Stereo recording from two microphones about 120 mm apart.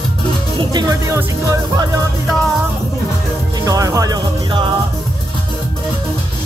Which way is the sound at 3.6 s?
30° right (ahead or behind).